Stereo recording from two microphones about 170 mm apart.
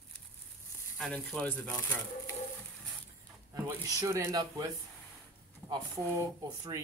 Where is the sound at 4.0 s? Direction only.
15° right (ahead or behind).